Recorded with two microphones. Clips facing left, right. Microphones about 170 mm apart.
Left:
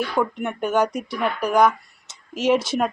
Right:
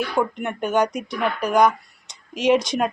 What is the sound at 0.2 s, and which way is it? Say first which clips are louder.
A woman's voice: even; 5° left (ahead or behind).